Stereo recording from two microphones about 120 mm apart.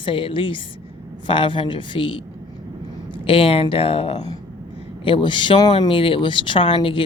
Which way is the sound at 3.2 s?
50° left (ahead or behind).